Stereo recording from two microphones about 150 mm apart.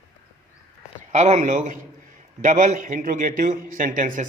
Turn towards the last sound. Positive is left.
turn(degrees=-60)  # may be behind; listen again after turning